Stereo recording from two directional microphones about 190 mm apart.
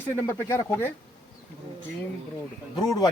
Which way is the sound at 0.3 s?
15° left (ahead or behind).